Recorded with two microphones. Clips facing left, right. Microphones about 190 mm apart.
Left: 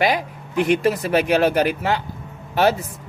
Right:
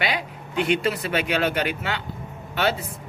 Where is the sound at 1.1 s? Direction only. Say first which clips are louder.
Left 8 dB; 40° left (ahead or behind).